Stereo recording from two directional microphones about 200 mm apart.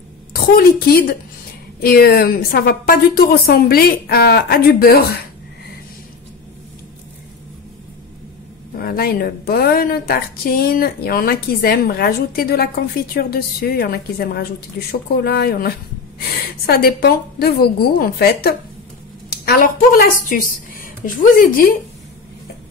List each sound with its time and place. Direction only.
0.3 s a woman's voice: 50° left (ahead or behind)
8.7 s a woman's voice: 50° left (ahead or behind)